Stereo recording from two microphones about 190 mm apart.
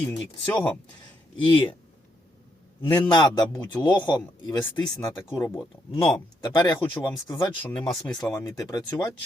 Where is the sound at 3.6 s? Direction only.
20° left (ahead or behind).